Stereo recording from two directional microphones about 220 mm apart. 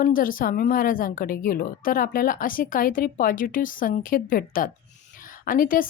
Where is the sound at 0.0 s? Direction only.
40° left (ahead or behind).